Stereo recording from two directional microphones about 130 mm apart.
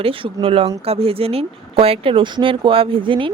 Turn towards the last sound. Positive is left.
turn(degrees=-40)  # may be behind; listen again after turning